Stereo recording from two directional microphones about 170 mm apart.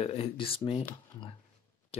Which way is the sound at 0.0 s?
35° left (ahead or behind).